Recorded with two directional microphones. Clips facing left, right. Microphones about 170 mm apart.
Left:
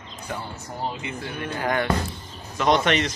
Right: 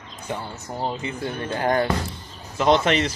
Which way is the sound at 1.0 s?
35° right (ahead or behind).